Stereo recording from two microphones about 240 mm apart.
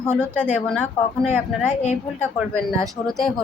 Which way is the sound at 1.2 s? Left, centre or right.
Centre.